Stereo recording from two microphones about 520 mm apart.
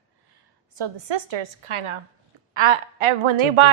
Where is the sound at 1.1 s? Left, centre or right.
Right.